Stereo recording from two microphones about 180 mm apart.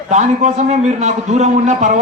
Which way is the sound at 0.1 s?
40° right (ahead or behind).